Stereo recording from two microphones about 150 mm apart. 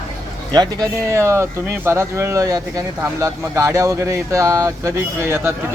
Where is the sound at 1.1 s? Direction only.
20° right (ahead or behind).